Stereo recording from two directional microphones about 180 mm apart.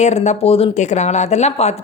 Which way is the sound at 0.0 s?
40° left (ahead or behind).